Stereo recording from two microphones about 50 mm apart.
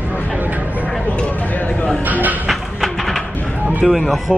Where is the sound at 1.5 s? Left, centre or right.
Left.